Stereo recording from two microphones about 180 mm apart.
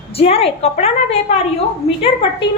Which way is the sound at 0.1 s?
35° left (ahead or behind).